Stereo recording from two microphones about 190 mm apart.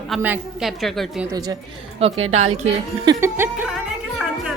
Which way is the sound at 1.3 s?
20° right (ahead or behind).